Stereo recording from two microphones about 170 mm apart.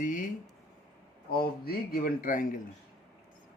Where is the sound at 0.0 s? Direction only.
50° left (ahead or behind).